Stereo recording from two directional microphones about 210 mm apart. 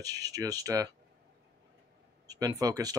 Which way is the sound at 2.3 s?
15° right (ahead or behind).